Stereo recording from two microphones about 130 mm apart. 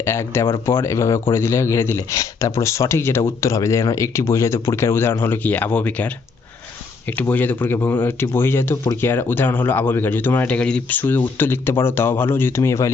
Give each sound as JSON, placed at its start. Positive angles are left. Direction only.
{"t": 0.0, "sound": "speech", "side_deg": 20}
{"t": 7.2, "sound": "speech", "side_deg": 15}